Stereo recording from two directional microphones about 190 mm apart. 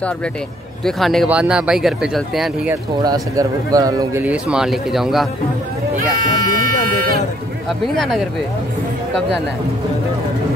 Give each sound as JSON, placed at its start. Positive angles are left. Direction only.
{"t": 0.8, "sound": "speech", "side_deg": 0}
{"t": 2.7, "sound": "speech", "side_deg": -20}
{"t": 6.1, "sound": "speech", "side_deg": -50}
{"t": 7.8, "sound": "speech", "side_deg": 0}